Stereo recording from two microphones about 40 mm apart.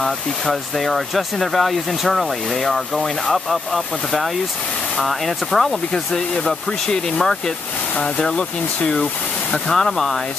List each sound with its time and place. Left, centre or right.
0.0 s speech: centre